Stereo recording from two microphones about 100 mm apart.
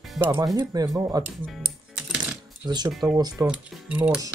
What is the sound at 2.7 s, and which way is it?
Speech, 45° right (ahead or behind).